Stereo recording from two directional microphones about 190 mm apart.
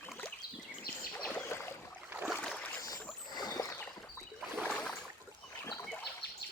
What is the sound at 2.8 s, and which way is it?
Boat, 20° left (ahead or behind).